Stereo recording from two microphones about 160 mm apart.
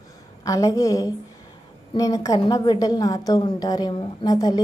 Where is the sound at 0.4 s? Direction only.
20° left (ahead or behind).